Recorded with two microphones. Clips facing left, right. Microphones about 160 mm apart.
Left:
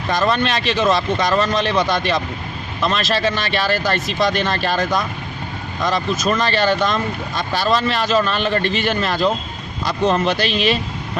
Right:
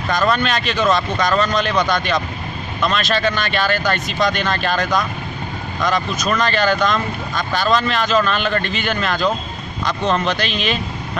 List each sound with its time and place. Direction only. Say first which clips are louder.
0.1 s speech: even; 30° left (ahead or behind)